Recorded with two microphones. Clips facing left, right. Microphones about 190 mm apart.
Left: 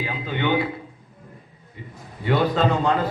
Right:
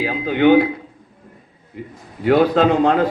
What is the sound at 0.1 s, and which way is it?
Speech, 65° right (ahead or behind).